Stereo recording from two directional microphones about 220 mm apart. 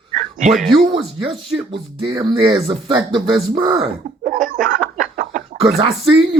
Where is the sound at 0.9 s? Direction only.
25° right (ahead or behind).